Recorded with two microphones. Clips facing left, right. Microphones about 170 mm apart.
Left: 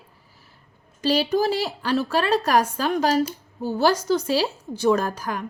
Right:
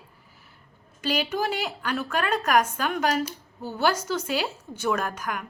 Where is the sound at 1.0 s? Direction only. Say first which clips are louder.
Left 6 dB; 35° left (ahead or behind).